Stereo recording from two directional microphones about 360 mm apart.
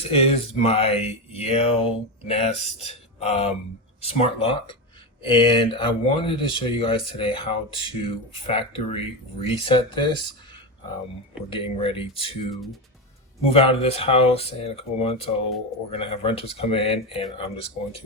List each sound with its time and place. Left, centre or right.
0.0 s speech: centre
11.4 s speech: centre
13.4 s speech: centre